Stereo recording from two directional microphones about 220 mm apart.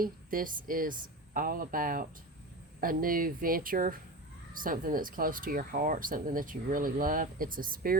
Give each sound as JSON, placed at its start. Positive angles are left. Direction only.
{"t": 0.0, "sound": "speech", "side_deg": -40}